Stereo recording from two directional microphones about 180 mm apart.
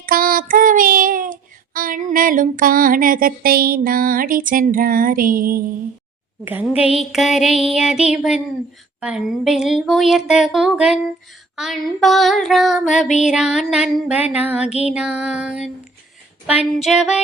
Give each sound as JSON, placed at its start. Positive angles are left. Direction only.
{"t": 0.0, "sound": "child singing", "side_deg": -50}
{"t": 6.4, "sound": "speech", "side_deg": -10}
{"t": 13.1, "sound": "music", "side_deg": 40}
{"t": 13.3, "sound": "speech", "side_deg": -5}
{"t": 14.7, "sound": "music", "side_deg": 35}
{"t": 14.9, "sound": "speech", "side_deg": -5}